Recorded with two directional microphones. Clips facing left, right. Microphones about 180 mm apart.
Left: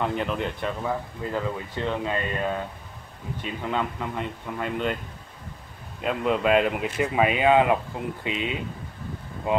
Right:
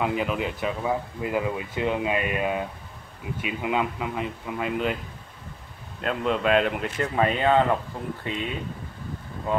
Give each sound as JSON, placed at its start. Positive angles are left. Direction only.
{"t": 0.0, "sound": "speech", "side_deg": -5}
{"t": 5.9, "sound": "speech", "side_deg": 5}